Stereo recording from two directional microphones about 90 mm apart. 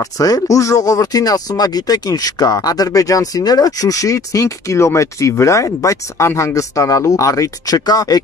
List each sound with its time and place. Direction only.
0.0 s speech: 40° left (ahead or behind)